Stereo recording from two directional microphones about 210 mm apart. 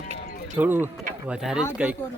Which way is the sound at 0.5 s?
10° right (ahead or behind).